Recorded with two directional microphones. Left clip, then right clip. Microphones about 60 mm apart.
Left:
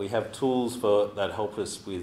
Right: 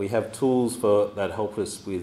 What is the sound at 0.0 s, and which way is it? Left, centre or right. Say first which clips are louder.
A man's voice: right 3 dB; right.